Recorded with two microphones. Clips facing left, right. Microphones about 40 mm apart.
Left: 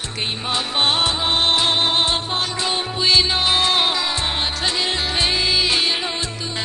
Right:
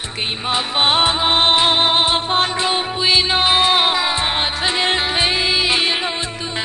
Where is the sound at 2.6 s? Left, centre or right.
Right.